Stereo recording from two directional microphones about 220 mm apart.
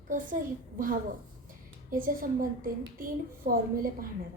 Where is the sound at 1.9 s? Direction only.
40° right (ahead or behind).